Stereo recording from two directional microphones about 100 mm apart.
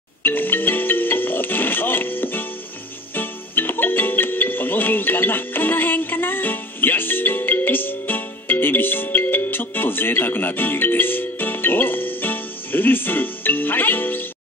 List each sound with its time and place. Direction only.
0.2 s music: 20° left (ahead or behind)